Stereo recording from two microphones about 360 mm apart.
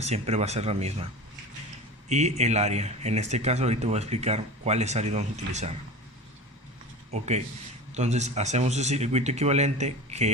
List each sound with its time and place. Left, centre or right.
0.0 s speech: centre
2.0 s speech: centre
7.1 s speech: centre